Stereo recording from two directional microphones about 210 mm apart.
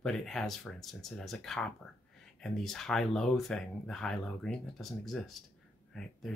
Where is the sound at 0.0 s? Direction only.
5° left (ahead or behind).